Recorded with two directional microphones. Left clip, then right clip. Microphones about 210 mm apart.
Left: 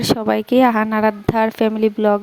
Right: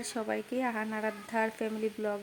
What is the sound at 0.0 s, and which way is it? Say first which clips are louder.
A woman's voice: left 17 dB; 45° left (ahead or behind).